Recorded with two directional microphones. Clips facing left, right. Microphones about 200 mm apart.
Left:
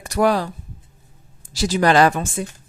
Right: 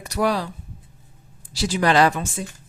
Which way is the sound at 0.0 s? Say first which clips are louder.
Left 4 dB; 50° left (ahead or behind).